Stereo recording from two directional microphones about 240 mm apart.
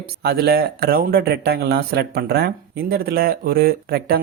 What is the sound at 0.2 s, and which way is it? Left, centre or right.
Speech, right.